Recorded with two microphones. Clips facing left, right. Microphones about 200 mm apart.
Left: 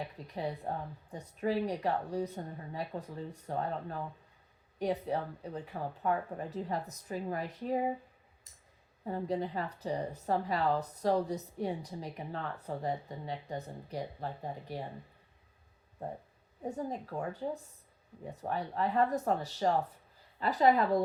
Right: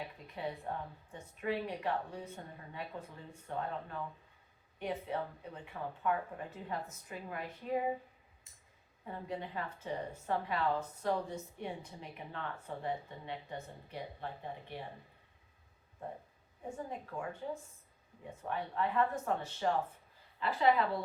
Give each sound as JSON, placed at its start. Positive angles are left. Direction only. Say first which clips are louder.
{"t": 0.3, "sound": "speech", "louder": "left 3 dB", "side_deg": 40}
{"t": 9.0, "sound": "speech", "louder": "left 7 dB", "side_deg": 35}
{"t": 16.6, "sound": "speech", "louder": "left 5 dB", "side_deg": 40}